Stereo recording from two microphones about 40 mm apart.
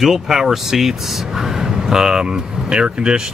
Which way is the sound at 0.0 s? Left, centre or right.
Centre.